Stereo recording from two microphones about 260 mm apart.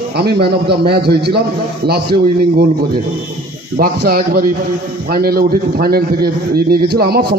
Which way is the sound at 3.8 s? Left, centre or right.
Right.